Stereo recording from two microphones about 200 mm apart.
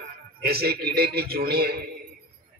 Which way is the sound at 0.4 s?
50° right (ahead or behind).